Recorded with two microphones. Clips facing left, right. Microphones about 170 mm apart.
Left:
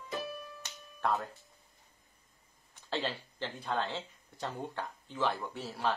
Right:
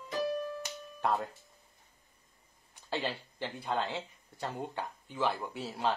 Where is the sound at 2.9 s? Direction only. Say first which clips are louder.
Even; 10° right (ahead or behind).